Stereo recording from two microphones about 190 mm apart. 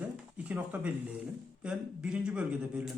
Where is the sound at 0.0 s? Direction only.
10° right (ahead or behind).